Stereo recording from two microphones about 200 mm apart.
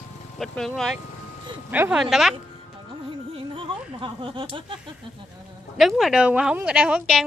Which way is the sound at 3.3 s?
25° right (ahead or behind).